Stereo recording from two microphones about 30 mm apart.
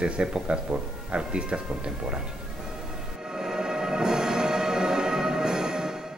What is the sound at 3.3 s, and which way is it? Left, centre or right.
Music, centre.